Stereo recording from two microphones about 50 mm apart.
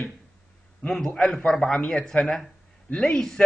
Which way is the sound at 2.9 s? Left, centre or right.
Left.